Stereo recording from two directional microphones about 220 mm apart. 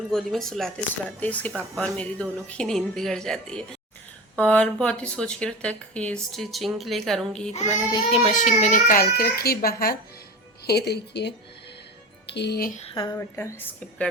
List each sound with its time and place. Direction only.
0.1 s a woman's voice: centre (ahead or behind)
7.5 s a child's voice: 25° left (ahead or behind)
12.8 s a woman's voice: 20° left (ahead or behind)